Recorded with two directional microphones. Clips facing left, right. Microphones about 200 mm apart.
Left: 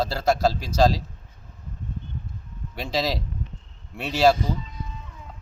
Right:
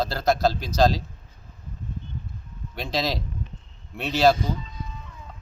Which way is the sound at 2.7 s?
5° left (ahead or behind).